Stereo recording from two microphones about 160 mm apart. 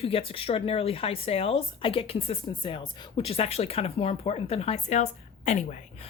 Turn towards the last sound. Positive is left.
turn(degrees=50)  # may be behind; listen again after turning